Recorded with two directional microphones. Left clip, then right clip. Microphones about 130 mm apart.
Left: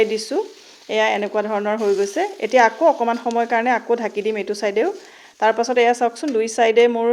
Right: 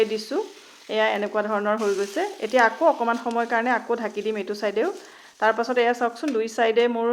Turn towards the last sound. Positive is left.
turn(degrees=40)  # may be behind; listen again after turning